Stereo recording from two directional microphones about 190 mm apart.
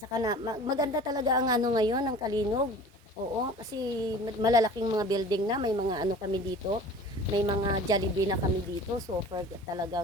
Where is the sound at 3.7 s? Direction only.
20° right (ahead or behind).